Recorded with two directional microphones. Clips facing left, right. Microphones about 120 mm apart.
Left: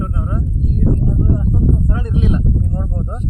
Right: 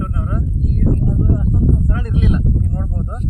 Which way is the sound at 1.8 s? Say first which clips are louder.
Left 1 dB; 25° left (ahead or behind).